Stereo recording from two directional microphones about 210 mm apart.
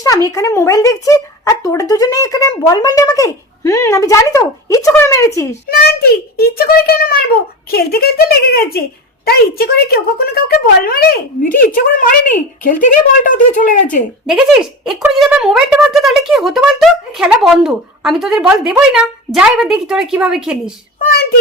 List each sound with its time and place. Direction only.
0.0 s speech: 15° left (ahead or behind)
5.6 s a child's voice: 45° left (ahead or behind)
14.3 s speech: 5° right (ahead or behind)